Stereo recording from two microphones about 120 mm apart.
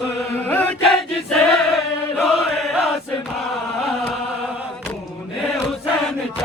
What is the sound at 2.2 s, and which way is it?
Chant, centre (ahead or behind).